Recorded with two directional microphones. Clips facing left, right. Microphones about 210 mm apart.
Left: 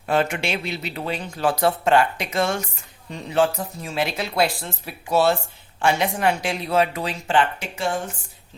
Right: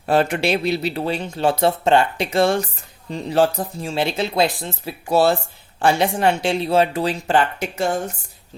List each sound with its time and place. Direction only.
0.0 s speech: 35° right (ahead or behind)
5.0 s speech: 35° right (ahead or behind)